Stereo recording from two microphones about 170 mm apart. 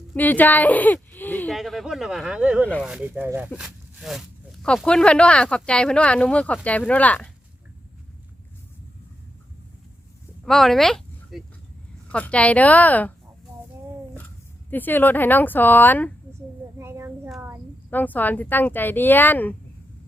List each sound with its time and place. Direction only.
0.1 s speech: 10° left (ahead or behind)
10.4 s speech: centre (ahead or behind)
14.7 s speech: 10° left (ahead or behind)
16.7 s child singing: 15° right (ahead or behind)
17.9 s speech: 10° left (ahead or behind)